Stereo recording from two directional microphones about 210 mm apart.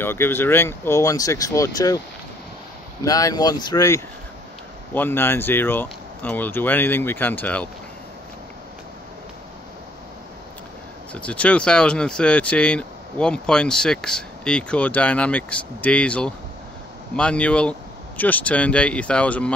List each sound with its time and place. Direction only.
0.0 s speech: 10° left (ahead or behind)
3.0 s speech: 15° left (ahead or behind)
11.1 s speech: 5° left (ahead or behind)